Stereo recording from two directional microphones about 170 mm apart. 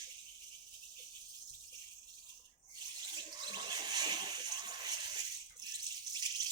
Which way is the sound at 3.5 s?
25° right (ahead or behind).